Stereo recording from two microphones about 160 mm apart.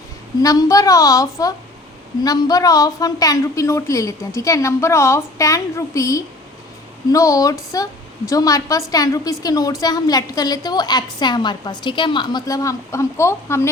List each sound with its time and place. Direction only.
0.4 s a woman's voice: 20° left (ahead or behind)